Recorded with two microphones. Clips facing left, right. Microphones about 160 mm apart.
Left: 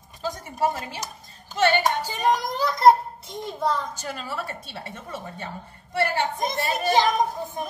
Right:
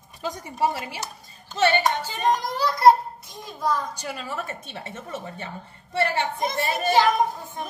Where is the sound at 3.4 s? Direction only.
25° left (ahead or behind).